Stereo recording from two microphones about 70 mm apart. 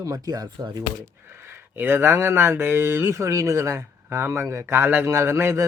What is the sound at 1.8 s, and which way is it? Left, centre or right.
Speech, right.